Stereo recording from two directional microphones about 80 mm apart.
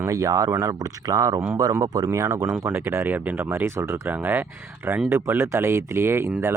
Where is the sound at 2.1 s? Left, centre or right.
Right.